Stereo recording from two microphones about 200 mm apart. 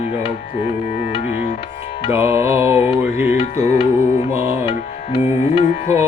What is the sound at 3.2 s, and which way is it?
Music, 30° left (ahead or behind).